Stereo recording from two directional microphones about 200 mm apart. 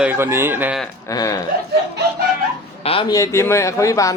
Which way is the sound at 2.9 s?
25° left (ahead or behind).